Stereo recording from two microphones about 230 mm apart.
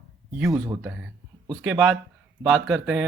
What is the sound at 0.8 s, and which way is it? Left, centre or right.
Speech, centre.